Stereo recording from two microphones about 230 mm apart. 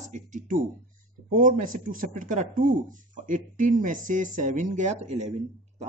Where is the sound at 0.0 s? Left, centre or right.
Right.